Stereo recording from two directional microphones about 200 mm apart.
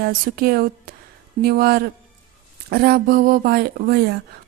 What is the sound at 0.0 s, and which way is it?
Speech, 50° right (ahead or behind).